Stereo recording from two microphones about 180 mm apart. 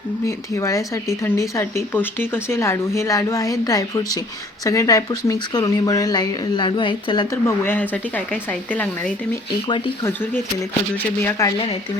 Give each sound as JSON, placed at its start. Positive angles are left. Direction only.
{"t": 0.3, "sound": "speech", "side_deg": 15}
{"t": 7.4, "sound": "speech", "side_deg": 10}
{"t": 9.6, "sound": "speech", "side_deg": 25}
{"t": 10.1, "sound": "speech", "side_deg": 10}